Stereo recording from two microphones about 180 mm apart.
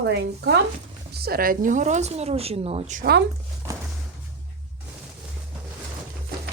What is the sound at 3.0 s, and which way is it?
Speech, 65° right (ahead or behind).